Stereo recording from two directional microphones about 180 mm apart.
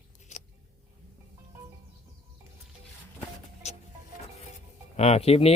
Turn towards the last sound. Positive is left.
turn(degrees=35)  # may be behind; listen again after turning